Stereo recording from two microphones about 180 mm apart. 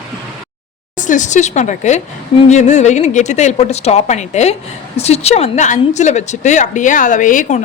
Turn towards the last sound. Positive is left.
turn(degrees=45)  # may be behind; listen again after turning